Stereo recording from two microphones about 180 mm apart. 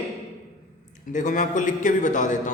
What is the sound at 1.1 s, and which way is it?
A man's voice, 45° left (ahead or behind).